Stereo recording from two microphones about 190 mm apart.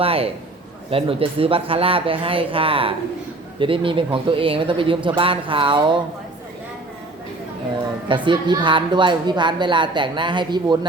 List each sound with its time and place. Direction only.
0.0 s a man's voice: 30° right (ahead or behind)
8.0 s a woman's voice: 25° right (ahead or behind)